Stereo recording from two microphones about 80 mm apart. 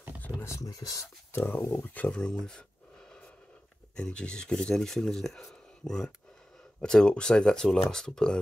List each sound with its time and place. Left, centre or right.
0.4 s speech: left
1.3 s speech: left
2.0 s speech: centre
3.9 s speech: centre
5.5 s a sound: centre
6.8 s speech: centre